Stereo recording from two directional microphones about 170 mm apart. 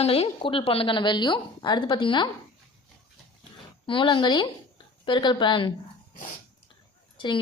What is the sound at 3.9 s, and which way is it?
A woman's voice, 30° left (ahead or behind).